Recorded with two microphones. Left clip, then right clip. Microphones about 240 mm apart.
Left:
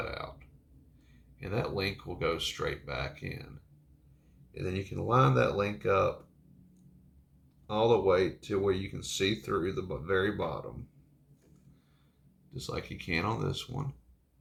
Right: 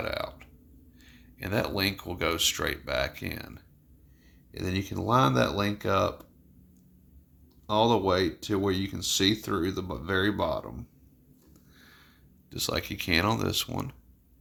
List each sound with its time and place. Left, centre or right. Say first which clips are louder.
0.0 s burping: right 6 dB; right
1.0 s speech: right 6 dB; right
7.7 s speech: right 2 dB; right
12.5 s speech: right 8 dB; right